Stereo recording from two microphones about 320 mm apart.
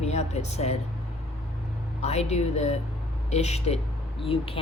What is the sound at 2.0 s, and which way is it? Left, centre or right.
A woman's voice, centre.